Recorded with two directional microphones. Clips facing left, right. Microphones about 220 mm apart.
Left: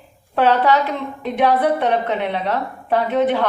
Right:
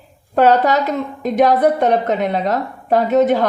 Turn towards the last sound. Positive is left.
turn(degrees=-40)  # may be behind; listen again after turning